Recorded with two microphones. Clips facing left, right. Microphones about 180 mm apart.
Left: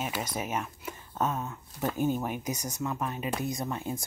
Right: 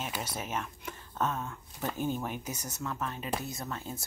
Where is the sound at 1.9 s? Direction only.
45° left (ahead or behind).